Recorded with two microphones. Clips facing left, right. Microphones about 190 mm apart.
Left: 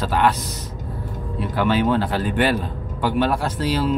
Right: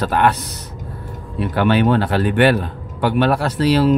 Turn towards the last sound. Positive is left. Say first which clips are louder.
# right 6 dB
turn(degrees=-70)  # may be behind; listen again after turning